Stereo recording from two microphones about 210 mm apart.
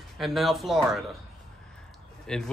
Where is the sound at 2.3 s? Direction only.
5° left (ahead or behind).